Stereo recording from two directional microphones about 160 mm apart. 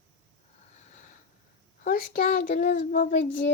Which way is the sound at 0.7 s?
45° left (ahead or behind).